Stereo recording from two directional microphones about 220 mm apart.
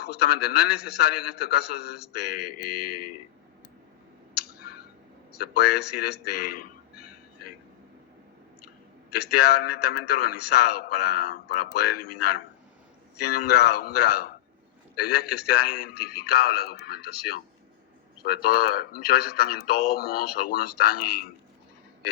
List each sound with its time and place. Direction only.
0.0 s a man's voice: 45° left (ahead or behind)
2.4 s a sound: 90° left
4.5 s clicking: 45° left (ahead or behind)
5.4 s a man's voice: 45° left (ahead or behind)
9.3 s a man's voice: 45° left (ahead or behind)
13.2 s a man's voice: 45° left (ahead or behind)